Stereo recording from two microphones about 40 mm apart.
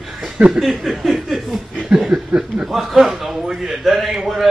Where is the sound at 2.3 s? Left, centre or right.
Centre.